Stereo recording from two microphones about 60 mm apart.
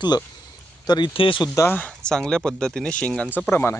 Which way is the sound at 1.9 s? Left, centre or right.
Centre.